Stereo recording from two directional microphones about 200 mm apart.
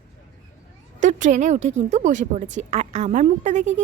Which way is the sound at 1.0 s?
40° right (ahead or behind).